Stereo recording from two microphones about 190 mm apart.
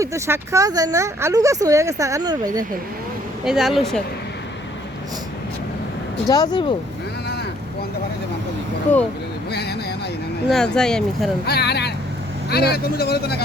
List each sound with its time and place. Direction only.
0.0 s speech: 15° right (ahead or behind)
3.4 s speech: 5° right (ahead or behind)
6.2 s speech: 20° left (ahead or behind)
9.5 s a sound: 60° left (ahead or behind)
10.5 s speech: 5° left (ahead or behind)
11.4 s speech: 60° left (ahead or behind)